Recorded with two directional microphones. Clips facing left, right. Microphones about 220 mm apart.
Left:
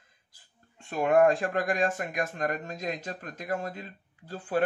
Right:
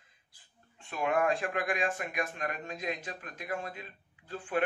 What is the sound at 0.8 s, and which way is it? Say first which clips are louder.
Speech: left 8 dB; 45° left (ahead or behind).